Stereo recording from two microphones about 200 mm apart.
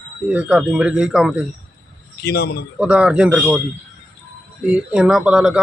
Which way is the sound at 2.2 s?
55° left (ahead or behind).